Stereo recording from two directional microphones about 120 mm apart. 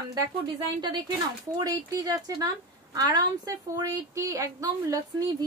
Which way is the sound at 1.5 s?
30° right (ahead or behind).